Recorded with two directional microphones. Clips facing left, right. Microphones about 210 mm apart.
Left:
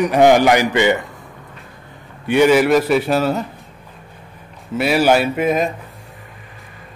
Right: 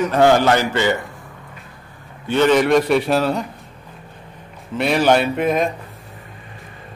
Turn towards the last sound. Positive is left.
turn(degrees=5)  # may be behind; listen again after turning